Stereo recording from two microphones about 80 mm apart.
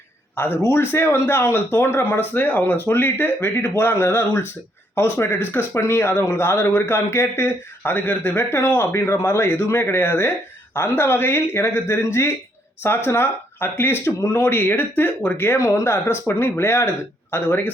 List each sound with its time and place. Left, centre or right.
0.3 s speech: left